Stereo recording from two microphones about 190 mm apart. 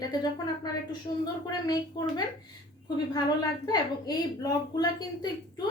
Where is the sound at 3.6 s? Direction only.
20° left (ahead or behind).